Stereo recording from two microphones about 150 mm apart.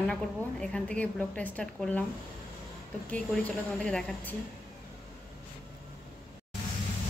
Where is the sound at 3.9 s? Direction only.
5° left (ahead or behind).